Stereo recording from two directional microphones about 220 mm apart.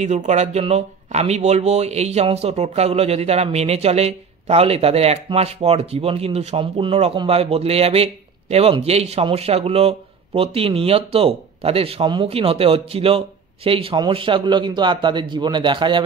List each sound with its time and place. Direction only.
0.0 s speech: 30° right (ahead or behind)